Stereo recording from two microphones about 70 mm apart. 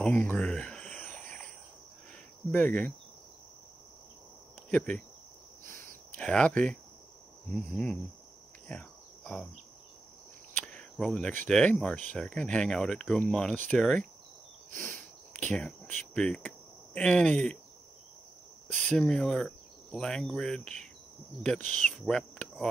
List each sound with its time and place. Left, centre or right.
0.0 s speech: left
0.5 s speech: centre
0.9 s a sound: centre
2.5 s speech: left
4.6 s speech: centre
6.1 s speech: centre
8.6 s cricket: centre
10.7 s cricket: centre
11.4 s speech: centre
14.9 s a sound: centre
16.2 s speech: centre
18.9 s speech: centre